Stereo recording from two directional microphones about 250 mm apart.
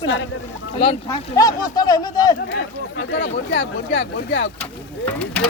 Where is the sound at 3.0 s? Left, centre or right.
Left.